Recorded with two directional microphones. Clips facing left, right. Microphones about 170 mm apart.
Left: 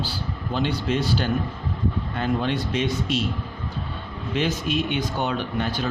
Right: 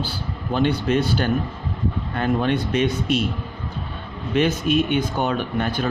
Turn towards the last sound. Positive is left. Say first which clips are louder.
# right 3 dB
turn(degrees=-50)  # may be behind; listen again after turning